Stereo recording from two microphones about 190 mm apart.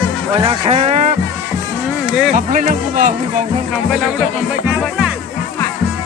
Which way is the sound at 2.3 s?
45° right (ahead or behind).